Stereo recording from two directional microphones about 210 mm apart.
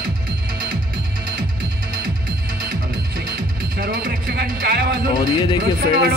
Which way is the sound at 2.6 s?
45° right (ahead or behind).